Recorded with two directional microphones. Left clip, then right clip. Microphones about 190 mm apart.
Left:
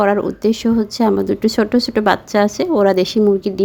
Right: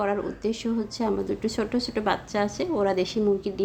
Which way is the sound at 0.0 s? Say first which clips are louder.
Left 11 dB; 40° left (ahead or behind).